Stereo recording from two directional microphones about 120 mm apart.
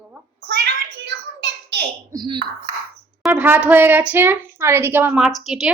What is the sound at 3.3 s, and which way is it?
A woman's voice, 15° right (ahead or behind).